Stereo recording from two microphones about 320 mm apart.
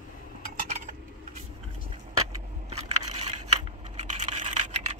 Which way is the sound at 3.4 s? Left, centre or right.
Right.